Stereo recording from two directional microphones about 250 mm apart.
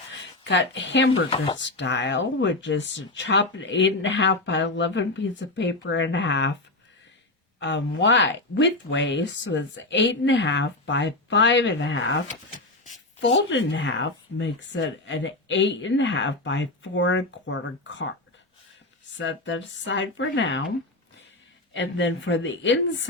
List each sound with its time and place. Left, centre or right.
0.4 s speech: left
7.6 s speech: left
13.5 s speech: left
19.1 s speech: left
21.7 s speech: left